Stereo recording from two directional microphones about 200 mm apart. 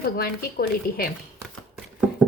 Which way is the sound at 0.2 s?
50° left (ahead or behind).